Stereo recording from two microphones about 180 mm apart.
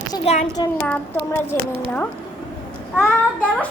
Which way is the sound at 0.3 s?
35° left (ahead or behind).